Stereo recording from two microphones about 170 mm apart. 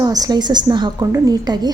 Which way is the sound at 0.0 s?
20° right (ahead or behind).